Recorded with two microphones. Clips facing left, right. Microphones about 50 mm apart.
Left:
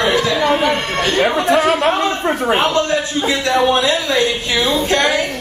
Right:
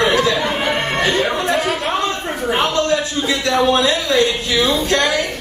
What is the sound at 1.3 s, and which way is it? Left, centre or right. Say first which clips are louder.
Speech: left 3 dB; left.